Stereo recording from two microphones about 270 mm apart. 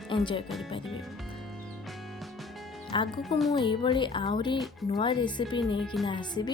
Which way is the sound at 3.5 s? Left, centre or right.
Centre.